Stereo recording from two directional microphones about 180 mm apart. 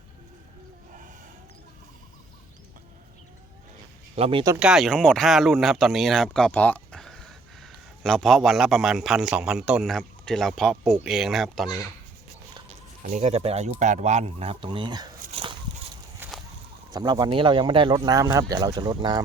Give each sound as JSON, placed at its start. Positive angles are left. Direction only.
{"t": 4.1, "sound": "speech", "side_deg": -30}
{"t": 4.6, "sound": "speech", "side_deg": 0}
{"t": 13.1, "sound": "speech", "side_deg": -40}
{"t": 15.3, "sound": "a sound", "side_deg": -30}
{"t": 16.2, "sound": "fowl", "side_deg": -10}
{"t": 16.9, "sound": "speech", "side_deg": -20}